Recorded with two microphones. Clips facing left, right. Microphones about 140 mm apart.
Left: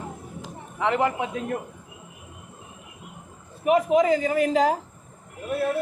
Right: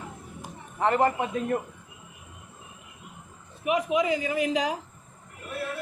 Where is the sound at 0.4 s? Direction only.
70° left (ahead or behind).